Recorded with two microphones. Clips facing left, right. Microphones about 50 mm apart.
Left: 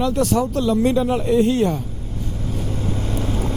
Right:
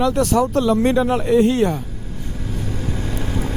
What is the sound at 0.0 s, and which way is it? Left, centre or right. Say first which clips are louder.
Speech: right 2 dB; right.